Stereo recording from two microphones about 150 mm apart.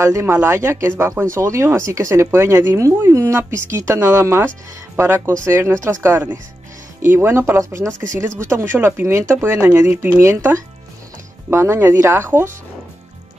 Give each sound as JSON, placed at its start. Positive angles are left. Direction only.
{"t": 0.0, "sound": "speech", "side_deg": -20}
{"t": 7.9, "sound": "speech", "side_deg": -60}
{"t": 8.4, "sound": "speech", "side_deg": -15}